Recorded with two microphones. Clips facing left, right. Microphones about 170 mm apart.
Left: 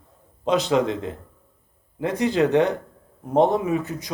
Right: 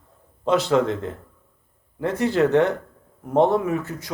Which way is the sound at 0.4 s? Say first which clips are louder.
Right 1 dB; 15° left (ahead or behind).